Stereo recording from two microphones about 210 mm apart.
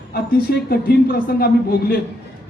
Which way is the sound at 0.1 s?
45° left (ahead or behind).